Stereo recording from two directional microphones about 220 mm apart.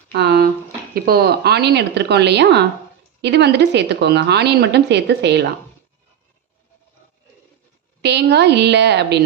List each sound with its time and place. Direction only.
0.1 s a sound: 50° right (ahead or behind)
0.9 s a woman's voice: 45° right (ahead or behind)
8.0 s a woman's voice: 50° right (ahead or behind)